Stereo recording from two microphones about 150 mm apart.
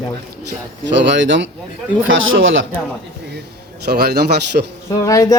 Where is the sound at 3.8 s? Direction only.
90° right.